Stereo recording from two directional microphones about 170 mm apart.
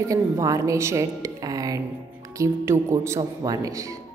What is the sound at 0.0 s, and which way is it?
Music, 20° right (ahead or behind).